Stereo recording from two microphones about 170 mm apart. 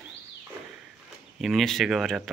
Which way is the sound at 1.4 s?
Centre (ahead or behind).